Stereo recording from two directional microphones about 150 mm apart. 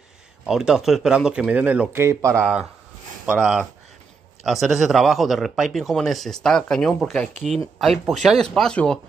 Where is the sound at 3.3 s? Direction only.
5° right (ahead or behind).